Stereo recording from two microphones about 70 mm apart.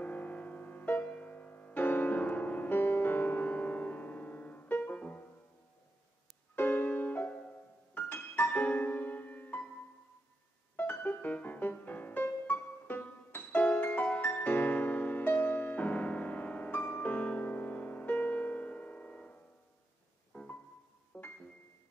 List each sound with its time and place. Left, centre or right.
0.0 s music: left
6.5 s music: left
10.8 s music: left
20.3 s music: centre